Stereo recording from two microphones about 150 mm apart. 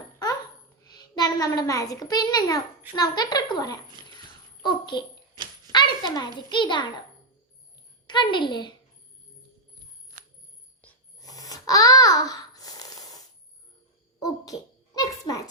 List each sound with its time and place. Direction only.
0.9 s a child's voice: 25° left (ahead or behind)
4.0 s speech: 30° right (ahead or behind)
4.6 s a child's voice: 30° left (ahead or behind)
8.0 s a child's voice: 30° left (ahead or behind)
10.1 s bicycle bell: 60° right (ahead or behind)
10.8 s ratchet: 10° left (ahead or behind)
11.2 s babbling: 25° left (ahead or behind)
14.9 s a sound: 25° left (ahead or behind)